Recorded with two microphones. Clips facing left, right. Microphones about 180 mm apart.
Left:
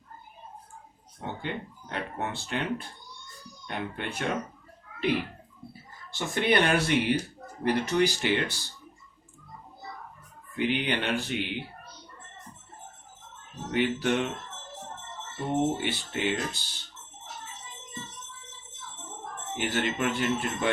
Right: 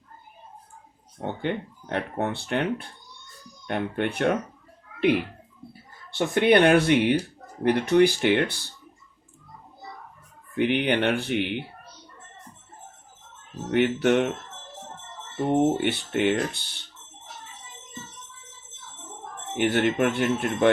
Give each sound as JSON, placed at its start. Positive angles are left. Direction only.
{"t": 1.2, "sound": "speech", "side_deg": -60}
{"t": 6.1, "sound": "speech", "side_deg": -60}
{"t": 10.6, "sound": "speech", "side_deg": -60}
{"t": 13.7, "sound": "speech", "side_deg": -60}
{"t": 15.8, "sound": "speech", "side_deg": -60}
{"t": 19.5, "sound": "speech", "side_deg": -60}